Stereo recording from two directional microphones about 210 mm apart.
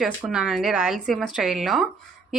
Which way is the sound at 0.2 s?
5° right (ahead or behind).